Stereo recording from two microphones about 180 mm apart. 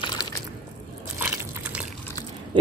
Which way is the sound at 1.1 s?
10° right (ahead or behind).